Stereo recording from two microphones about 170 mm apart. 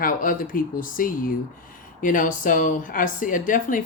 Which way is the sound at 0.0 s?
55° left (ahead or behind).